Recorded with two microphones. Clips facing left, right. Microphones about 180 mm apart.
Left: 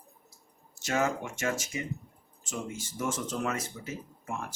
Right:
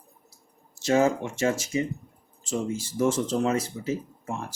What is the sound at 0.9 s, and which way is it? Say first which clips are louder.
Speech: right 7 dB; 30° right (ahead or behind).